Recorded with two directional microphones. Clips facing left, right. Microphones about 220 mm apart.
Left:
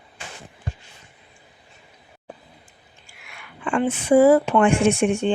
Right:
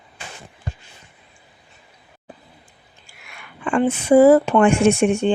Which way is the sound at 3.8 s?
40° right (ahead or behind).